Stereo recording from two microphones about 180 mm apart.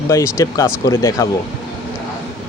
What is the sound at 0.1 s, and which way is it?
Speech, 15° left (ahead or behind).